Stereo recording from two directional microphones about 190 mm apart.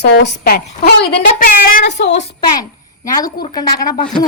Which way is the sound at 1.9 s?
70° left (ahead or behind).